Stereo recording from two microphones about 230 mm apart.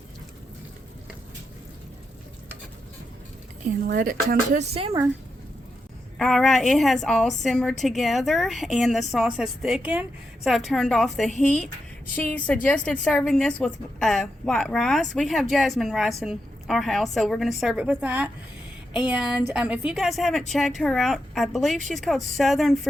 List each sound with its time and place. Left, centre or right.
3.8 s speech: right
6.1 s a woman's voice: centre